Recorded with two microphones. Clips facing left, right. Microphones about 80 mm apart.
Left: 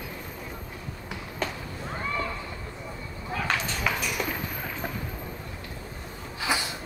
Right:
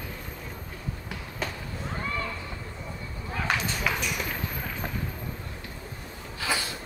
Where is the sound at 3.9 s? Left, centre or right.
Centre.